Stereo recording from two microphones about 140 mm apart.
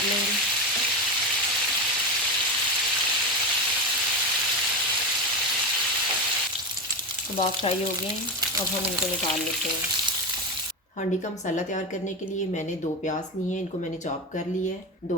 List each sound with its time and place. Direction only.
7.3 s frying: 40° left (ahead or behind)
11.4 s a woman's voice: 60° left (ahead or behind)